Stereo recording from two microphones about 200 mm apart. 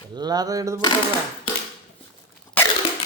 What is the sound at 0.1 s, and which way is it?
Speech, 20° right (ahead or behind).